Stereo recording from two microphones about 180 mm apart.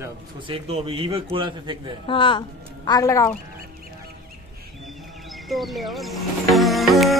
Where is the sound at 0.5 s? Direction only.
35° right (ahead or behind).